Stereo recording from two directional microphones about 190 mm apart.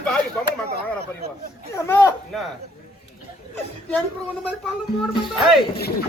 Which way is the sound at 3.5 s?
10° left (ahead or behind).